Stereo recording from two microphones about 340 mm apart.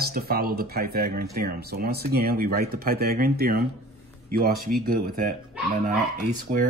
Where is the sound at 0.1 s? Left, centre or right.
Right.